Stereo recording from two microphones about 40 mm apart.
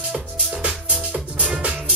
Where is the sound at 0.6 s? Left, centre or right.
Right.